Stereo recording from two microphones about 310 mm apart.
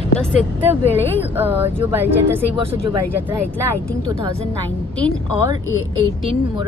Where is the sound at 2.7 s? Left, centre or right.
Centre.